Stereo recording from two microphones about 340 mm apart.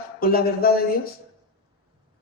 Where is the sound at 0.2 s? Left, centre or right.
Left.